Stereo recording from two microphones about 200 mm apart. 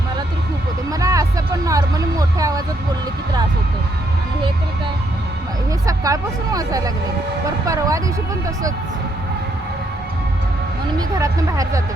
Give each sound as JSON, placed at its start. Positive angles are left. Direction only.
{"t": 0.9, "sound": "a sound", "side_deg": -15}
{"t": 5.8, "sound": "speech", "side_deg": -15}
{"t": 10.9, "sound": "speech", "side_deg": -15}